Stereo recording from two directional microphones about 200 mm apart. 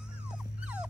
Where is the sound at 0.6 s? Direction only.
5° right (ahead or behind).